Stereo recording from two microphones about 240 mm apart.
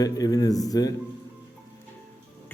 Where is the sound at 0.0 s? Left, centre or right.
Centre.